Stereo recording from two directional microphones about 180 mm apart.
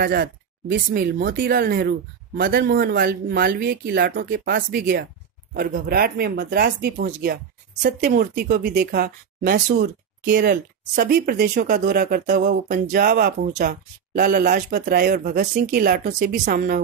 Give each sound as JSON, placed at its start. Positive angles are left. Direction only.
{"t": 0.0, "sound": "speech", "side_deg": -55}